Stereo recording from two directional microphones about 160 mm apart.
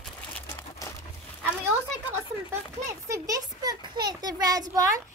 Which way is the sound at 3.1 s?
20° right (ahead or behind).